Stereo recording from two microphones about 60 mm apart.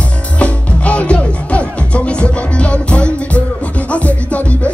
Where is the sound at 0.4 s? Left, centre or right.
Centre.